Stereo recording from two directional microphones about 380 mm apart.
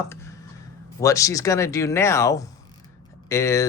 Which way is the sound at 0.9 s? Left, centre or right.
Centre.